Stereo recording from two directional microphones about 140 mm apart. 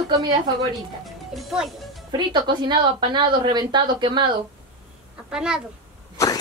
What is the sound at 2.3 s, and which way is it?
A woman's voice, 35° right (ahead or behind).